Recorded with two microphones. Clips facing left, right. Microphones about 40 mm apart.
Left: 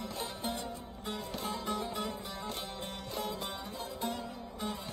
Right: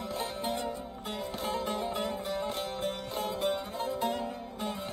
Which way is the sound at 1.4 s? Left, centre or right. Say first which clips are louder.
Right 4 dB; right.